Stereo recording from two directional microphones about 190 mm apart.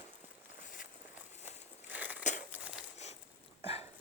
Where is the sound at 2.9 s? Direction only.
35° left (ahead or behind).